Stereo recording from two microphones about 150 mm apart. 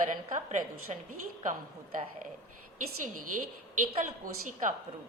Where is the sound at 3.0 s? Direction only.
60° right (ahead or behind).